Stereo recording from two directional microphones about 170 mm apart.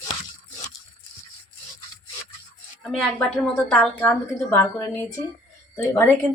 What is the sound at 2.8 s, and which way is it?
A woman's voice, centre (ahead or behind).